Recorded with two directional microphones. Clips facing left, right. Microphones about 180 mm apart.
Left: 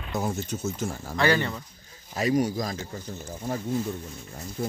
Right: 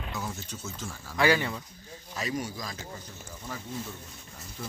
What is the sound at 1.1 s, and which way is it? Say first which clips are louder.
Speech: left 1 dB; 5° right (ahead or behind).